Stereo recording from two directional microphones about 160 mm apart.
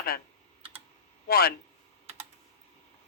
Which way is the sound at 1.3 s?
70° left (ahead or behind).